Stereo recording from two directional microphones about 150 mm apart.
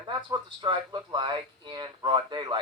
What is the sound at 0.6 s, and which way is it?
Speech, 30° right (ahead or behind).